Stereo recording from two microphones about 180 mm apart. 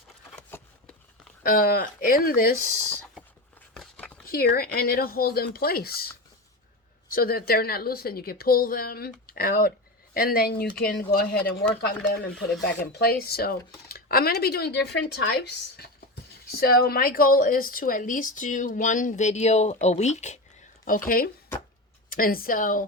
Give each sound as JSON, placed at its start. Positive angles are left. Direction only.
{"t": 0.5, "sound": "a sound", "side_deg": 15}
{"t": 1.5, "sound": "speech", "side_deg": 55}
{"t": 3.8, "sound": "a sound", "side_deg": 5}
{"t": 4.3, "sound": "a woman's voice", "side_deg": 55}
{"t": 7.1, "sound": "a woman's voice", "side_deg": 55}
{"t": 11.8, "sound": "a woman's voice", "side_deg": 70}
{"t": 22.1, "sound": "speech", "side_deg": 55}